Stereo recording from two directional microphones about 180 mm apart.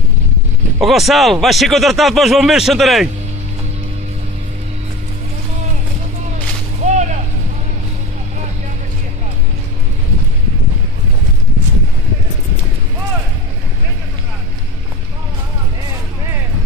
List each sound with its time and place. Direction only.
0.7 s speech: centre (ahead or behind)
6.8 s whip: 40° right (ahead or behind)